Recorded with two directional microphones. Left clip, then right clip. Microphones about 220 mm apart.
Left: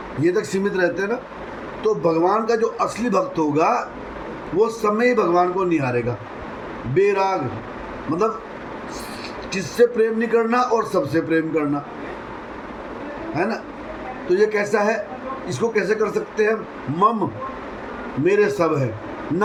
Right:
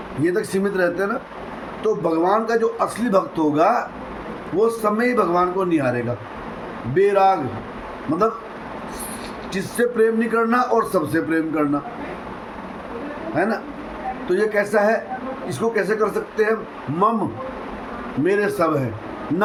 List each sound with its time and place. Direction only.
0.3 s a man's voice: 15° right (ahead or behind)
6.9 s a man's voice: 15° right (ahead or behind)
9.5 s a man's voice: 15° right (ahead or behind)
13.3 s a man's voice: 15° right (ahead or behind)
18.3 s a man's voice: 15° right (ahead or behind)